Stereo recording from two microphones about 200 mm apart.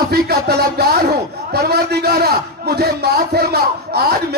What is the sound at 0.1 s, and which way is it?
Music, 55° right (ahead or behind).